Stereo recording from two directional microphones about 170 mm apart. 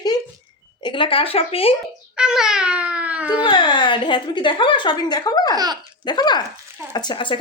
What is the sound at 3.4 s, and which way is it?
A woman's voice, 25° left (ahead or behind).